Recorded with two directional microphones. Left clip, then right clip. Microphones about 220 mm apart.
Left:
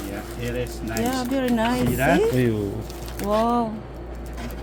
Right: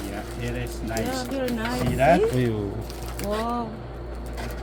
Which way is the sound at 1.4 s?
50° left (ahead or behind).